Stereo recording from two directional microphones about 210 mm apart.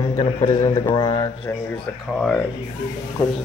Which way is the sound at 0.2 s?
20° left (ahead or behind).